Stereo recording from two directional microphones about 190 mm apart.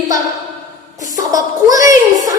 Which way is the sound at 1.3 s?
20° right (ahead or behind).